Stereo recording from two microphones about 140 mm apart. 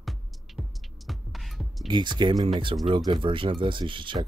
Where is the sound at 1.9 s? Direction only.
30° right (ahead or behind).